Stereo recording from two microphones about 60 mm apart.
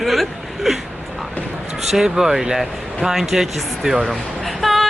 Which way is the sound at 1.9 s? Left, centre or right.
Centre.